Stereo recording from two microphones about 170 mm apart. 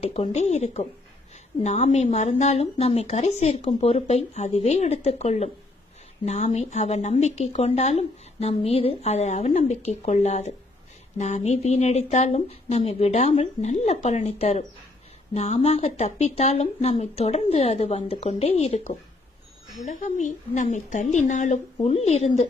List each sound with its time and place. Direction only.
0.0 s a woman's voice: 40° left (ahead or behind)
21.8 s speech: 35° left (ahead or behind)